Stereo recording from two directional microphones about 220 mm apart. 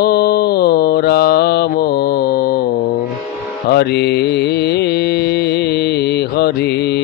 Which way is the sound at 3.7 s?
50° left (ahead or behind).